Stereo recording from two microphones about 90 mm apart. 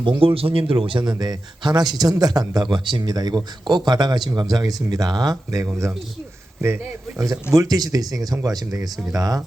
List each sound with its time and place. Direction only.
0.0 s speech: 65° right (ahead or behind)
1.2 s speech: 50° right (ahead or behind)
7.5 s speech: 40° right (ahead or behind)